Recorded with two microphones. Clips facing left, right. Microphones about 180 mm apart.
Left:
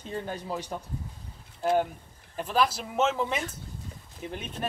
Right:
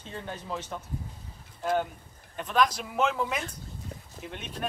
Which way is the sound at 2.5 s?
5° left (ahead or behind).